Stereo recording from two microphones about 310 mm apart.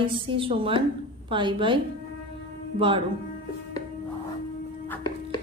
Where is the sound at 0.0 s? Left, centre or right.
Centre.